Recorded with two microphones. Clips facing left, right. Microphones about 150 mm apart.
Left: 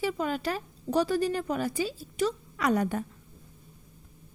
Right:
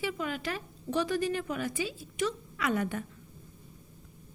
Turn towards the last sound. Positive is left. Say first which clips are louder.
# left 4 dB
turn(degrees=40)  # may be behind; listen again after turning